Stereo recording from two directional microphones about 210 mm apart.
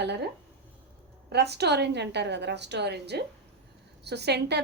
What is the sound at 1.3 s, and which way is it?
A woman's voice, 50° right (ahead or behind).